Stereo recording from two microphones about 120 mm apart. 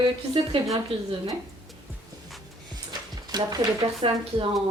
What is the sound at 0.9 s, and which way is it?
Speech, 55° right (ahead or behind).